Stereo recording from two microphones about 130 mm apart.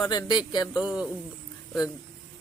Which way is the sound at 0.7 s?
10° right (ahead or behind).